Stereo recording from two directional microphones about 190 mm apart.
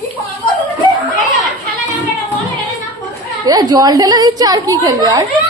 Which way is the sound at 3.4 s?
20° right (ahead or behind).